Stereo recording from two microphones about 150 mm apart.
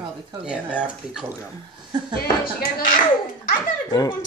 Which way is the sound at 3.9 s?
25° left (ahead or behind).